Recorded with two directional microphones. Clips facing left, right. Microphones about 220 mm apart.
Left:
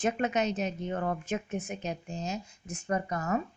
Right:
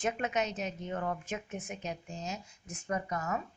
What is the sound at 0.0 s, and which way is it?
Speech, 35° left (ahead or behind).